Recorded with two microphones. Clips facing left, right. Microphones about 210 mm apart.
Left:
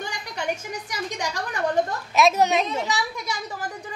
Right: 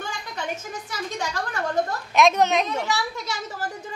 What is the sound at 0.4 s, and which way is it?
A woman's voice, 15° left (ahead or behind).